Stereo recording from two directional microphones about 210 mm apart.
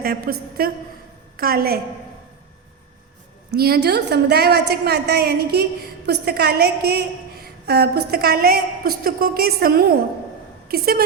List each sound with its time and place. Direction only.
0.0 s a woman's voice: 45° right (ahead or behind)
3.5 s a woman's voice: 50° right (ahead or behind)